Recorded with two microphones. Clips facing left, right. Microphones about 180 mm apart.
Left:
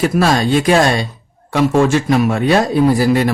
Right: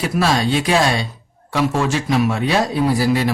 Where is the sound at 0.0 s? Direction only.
50° left (ahead or behind).